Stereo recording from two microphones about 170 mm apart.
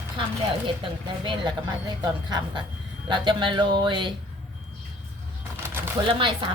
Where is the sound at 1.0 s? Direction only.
25° right (ahead or behind).